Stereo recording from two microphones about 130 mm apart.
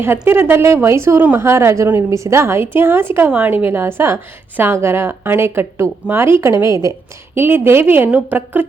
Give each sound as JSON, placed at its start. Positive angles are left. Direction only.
{"t": 0.0, "sound": "a woman's voice", "side_deg": -20}